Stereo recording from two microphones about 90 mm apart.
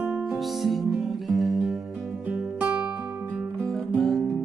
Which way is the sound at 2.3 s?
15° right (ahead or behind).